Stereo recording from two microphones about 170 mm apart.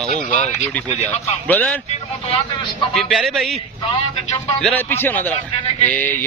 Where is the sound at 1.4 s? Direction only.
10° left (ahead or behind).